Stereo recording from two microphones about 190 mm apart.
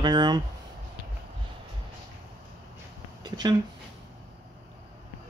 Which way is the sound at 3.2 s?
25° right (ahead or behind).